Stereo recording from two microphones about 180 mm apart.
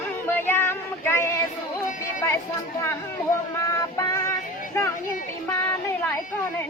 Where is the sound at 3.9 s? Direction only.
15° left (ahead or behind).